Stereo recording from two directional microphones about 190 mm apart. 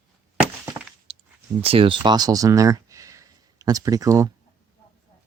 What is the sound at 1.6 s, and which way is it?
Speech, 30° right (ahead or behind).